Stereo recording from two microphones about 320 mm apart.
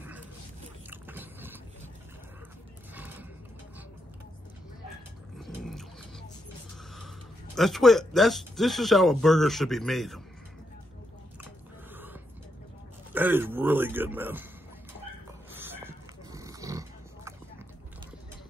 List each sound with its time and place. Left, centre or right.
0.8 s boat: centre
2.9 s horse: centre
5.4 s roaring cats: centre
7.5 s speech: centre
11.9 s a sound: centre
13.1 s speech: centre
15.5 s a sound: centre